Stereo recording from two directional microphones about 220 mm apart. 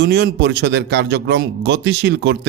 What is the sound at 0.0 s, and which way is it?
A man's voice, 45° right (ahead or behind).